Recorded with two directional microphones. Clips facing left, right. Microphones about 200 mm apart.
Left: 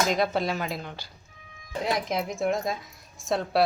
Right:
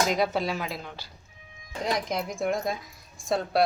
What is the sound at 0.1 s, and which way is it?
Speech, 5° right (ahead or behind).